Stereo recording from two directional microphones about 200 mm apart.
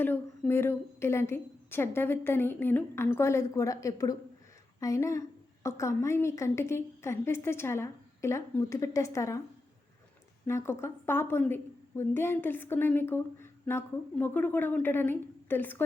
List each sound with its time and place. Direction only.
0.0 s a woman's voice: 10° left (ahead or behind)
10.4 s a woman's voice: 15° left (ahead or behind)